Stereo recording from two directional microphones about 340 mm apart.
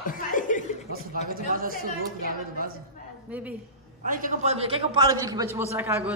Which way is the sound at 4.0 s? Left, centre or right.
Right.